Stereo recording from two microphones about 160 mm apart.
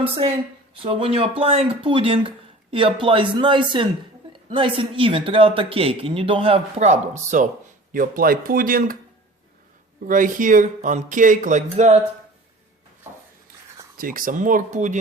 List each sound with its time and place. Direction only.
0.0 s speech: 35° right (ahead or behind)
7.9 s speech: 60° right (ahead or behind)
10.0 s speech: 55° right (ahead or behind)
13.9 s speech: 60° right (ahead or behind)